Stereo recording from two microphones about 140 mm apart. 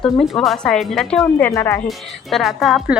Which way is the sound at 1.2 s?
20° left (ahead or behind).